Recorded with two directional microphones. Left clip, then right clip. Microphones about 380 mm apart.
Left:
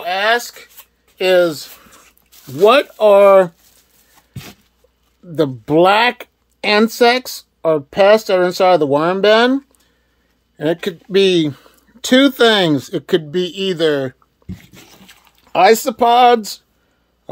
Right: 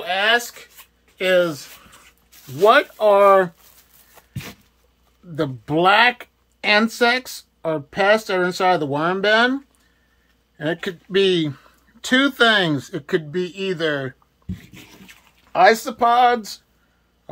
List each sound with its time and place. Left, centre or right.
0.0 s speech: centre
4.3 s a sound: centre
5.3 s speech: left